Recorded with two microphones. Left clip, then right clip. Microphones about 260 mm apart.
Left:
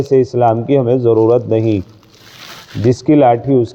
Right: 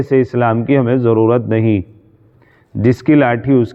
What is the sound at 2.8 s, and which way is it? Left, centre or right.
Speech, right.